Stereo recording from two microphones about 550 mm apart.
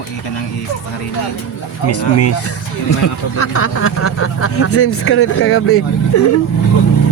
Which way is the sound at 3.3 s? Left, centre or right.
Left.